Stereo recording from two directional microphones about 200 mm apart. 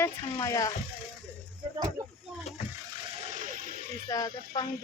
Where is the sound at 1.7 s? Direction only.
20° right (ahead or behind).